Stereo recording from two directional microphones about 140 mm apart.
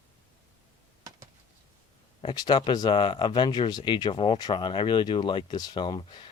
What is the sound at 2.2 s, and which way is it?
Speech, 30° left (ahead or behind).